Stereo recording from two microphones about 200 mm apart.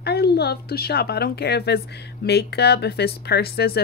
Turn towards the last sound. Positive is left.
turn(degrees=50)  # may be behind; listen again after turning